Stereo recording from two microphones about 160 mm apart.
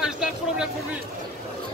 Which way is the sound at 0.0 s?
5° right (ahead or behind).